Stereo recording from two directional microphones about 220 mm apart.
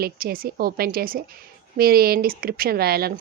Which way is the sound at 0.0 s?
40° right (ahead or behind).